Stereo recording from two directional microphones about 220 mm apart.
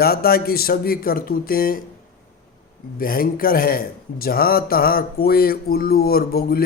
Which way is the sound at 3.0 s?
40° left (ahead or behind).